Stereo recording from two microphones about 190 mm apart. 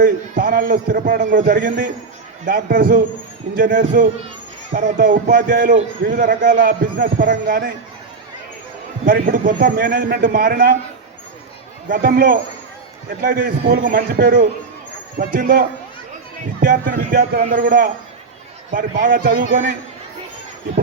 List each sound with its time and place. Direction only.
0.0 s a man's voice: 45° right (ahead or behind)
9.0 s a man's voice: 45° right (ahead or behind)
11.9 s a man's voice: 45° right (ahead or behind)